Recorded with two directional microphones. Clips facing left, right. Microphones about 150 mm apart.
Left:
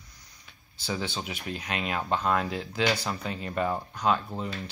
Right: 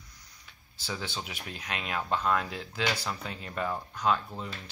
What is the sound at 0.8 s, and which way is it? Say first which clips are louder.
Speech: left 5 dB; 15° left (ahead or behind).